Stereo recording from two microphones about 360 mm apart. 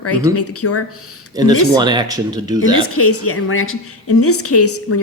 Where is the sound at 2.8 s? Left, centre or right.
Left.